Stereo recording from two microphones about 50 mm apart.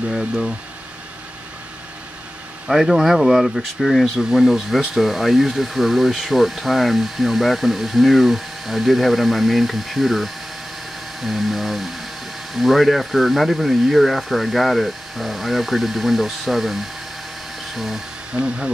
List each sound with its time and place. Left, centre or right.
2.7 s speech: centre
17.7 s speech: centre
18.3 s speech: centre